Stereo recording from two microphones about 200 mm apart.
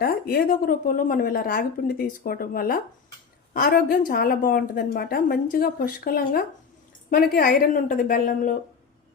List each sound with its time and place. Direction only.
0.0 s a woman's voice: 50° left (ahead or behind)